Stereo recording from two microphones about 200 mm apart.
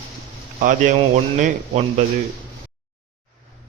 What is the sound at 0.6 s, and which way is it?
A man's voice, 40° right (ahead or behind).